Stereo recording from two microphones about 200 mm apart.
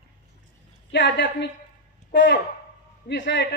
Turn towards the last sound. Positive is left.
turn(degrees=60)  # may be behind; listen again after turning